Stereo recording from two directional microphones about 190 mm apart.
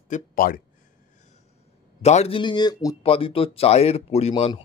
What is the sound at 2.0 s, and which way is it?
A man's voice, 35° left (ahead or behind).